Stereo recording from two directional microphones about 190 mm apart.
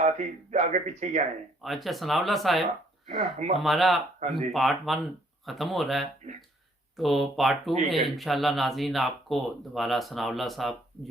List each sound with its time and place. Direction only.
0.0 s speech: 40° right (ahead or behind)
1.6 s speech: centre (ahead or behind)
3.2 s speech: 35° right (ahead or behind)
3.6 s speech: centre (ahead or behind)